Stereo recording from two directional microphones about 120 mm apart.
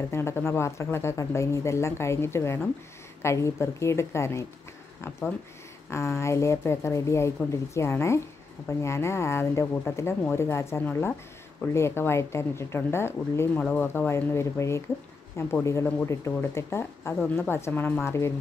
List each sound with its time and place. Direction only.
0.1 s speech: 20° left (ahead or behind)
5.9 s speech: 25° left (ahead or behind)